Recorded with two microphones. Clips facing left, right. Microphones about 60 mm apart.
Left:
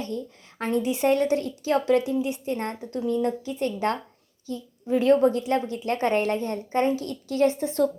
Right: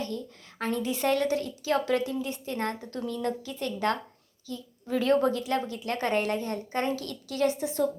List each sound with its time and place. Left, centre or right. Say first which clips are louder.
0.6 s a woman's voice: left 5 dB; left